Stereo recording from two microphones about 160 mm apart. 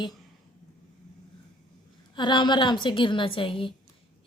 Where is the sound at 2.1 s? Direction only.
30° left (ahead or behind).